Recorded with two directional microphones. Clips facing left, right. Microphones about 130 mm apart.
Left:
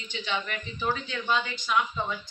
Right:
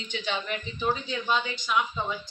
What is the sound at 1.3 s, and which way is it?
Speech, 5° right (ahead or behind).